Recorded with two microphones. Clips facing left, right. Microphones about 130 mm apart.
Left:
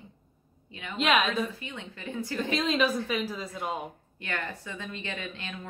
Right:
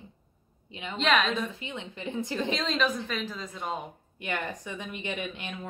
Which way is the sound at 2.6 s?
10° left (ahead or behind).